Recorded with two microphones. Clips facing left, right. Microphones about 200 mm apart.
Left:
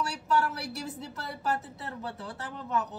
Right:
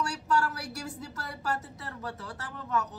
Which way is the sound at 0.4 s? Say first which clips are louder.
Left 1 dB; 20° left (ahead or behind).